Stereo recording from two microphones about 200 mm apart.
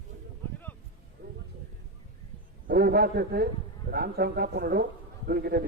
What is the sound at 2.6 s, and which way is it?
A man's voice, 50° right (ahead or behind).